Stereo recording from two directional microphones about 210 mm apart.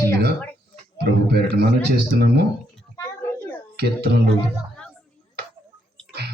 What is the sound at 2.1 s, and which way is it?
Speech, 50° right (ahead or behind).